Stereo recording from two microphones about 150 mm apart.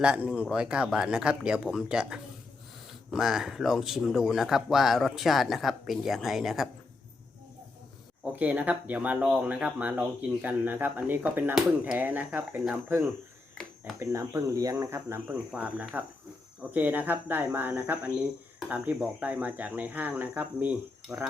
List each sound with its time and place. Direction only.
0.0 s speech: 5° right (ahead or behind)
8.2 s speech: 10° right (ahead or behind)
13.6 s a sound: 5° left (ahead or behind)
14.0 s speech: 20° right (ahead or behind)